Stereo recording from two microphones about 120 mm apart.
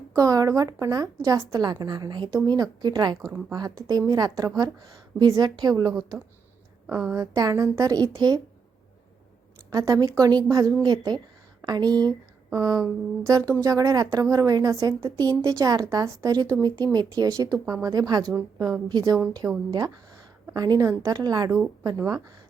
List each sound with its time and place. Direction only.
0.2 s a woman's voice: 30° right (ahead or behind)
6.8 s a woman's voice: 15° right (ahead or behind); by 8.4 s 30° right (ahead or behind)
9.6 s a woman's voice: 30° right (ahead or behind)
18.9 s a woman's voice: 35° right (ahead or behind)